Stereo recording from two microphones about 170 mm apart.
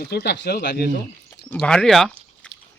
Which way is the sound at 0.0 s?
70° left (ahead or behind).